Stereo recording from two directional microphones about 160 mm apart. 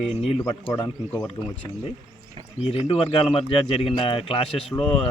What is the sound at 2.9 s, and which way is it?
Speech, 35° left (ahead or behind).